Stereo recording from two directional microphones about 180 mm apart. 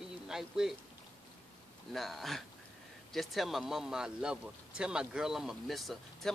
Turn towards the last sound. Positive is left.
turn(degrees=0)  # may be behind; listen again after turning